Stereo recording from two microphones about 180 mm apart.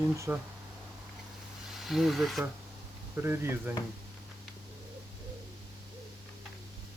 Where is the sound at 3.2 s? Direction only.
15° right (ahead or behind).